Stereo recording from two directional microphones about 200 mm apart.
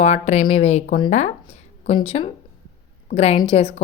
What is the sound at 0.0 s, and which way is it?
Speech, 35° left (ahead or behind).